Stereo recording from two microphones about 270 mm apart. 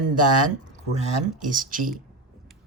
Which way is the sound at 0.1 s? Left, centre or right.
Right.